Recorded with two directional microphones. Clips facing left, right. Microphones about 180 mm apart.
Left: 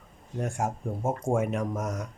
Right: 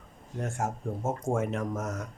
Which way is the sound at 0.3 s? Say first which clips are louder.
Left 2 dB; 15° left (ahead or behind).